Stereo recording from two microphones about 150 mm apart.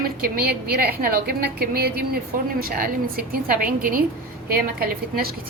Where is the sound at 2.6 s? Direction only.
75° right (ahead or behind).